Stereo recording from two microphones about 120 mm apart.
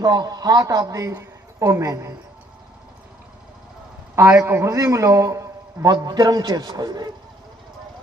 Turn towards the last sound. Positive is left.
turn(degrees=-35)  # may be behind; listen again after turning